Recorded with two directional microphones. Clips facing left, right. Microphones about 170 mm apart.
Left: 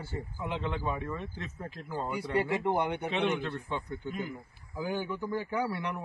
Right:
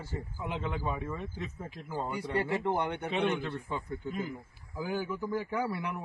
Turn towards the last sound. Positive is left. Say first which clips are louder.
# left 1 dB
turn(degrees=-5)  # may be behind; listen again after turning